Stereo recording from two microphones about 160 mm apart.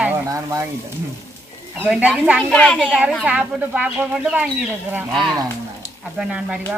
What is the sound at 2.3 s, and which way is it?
A child's voice, 5° left (ahead or behind).